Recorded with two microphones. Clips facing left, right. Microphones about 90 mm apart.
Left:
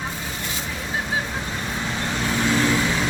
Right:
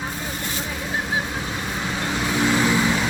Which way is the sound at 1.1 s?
5° right (ahead or behind).